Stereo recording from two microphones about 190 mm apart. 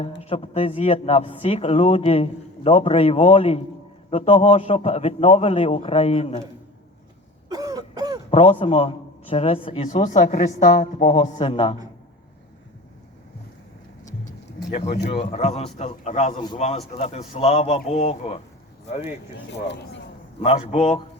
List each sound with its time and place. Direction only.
0.2 s a man's voice: 30° left (ahead or behind)
7.5 s throat clearing: 20° right (ahead or behind)
8.3 s a man's voice: 30° left (ahead or behind)
11.0 s a man's voice: 25° left (ahead or behind)
14.8 s a man's voice: 35° left (ahead or behind)
19.5 s speech: 65° left (ahead or behind)
20.4 s a man's voice: 35° left (ahead or behind)